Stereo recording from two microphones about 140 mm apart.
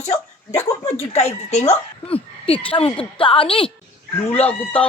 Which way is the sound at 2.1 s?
40° left (ahead or behind).